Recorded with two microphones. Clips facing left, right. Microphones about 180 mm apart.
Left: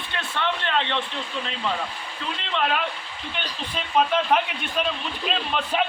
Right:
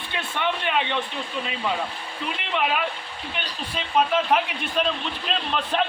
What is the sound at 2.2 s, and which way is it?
A man's voice, 10° right (ahead or behind).